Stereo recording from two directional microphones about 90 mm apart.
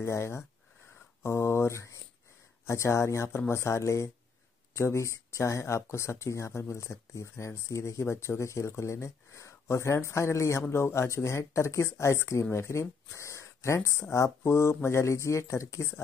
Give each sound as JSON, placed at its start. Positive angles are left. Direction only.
{"t": 0.0, "sound": "speech", "side_deg": 30}